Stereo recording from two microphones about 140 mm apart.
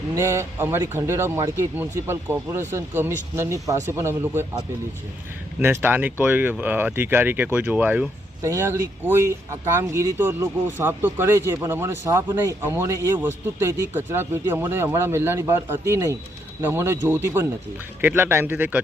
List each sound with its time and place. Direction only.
0.1 s speech: 20° right (ahead or behind)
5.5 s speech: 15° right (ahead or behind)